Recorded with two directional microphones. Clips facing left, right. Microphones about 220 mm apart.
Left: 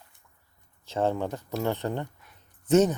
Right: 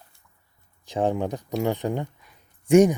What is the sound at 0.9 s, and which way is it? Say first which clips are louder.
Speech: right 3 dB; 15° right (ahead or behind).